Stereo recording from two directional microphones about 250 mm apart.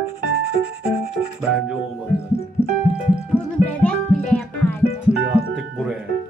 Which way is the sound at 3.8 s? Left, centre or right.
Centre.